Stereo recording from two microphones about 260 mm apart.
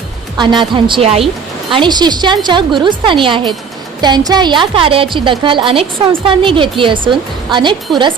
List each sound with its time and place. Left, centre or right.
0.3 s a woman's voice: centre